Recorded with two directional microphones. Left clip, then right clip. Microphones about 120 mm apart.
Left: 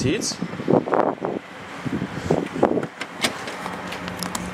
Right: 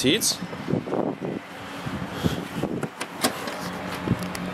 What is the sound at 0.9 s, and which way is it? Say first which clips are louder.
Vehicle: left 7 dB; 55° left (ahead or behind).